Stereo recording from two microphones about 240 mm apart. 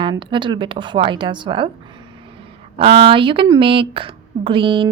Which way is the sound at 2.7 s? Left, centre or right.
Right.